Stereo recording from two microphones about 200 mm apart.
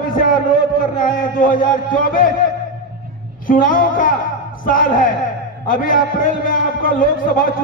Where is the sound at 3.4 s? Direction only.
45° left (ahead or behind).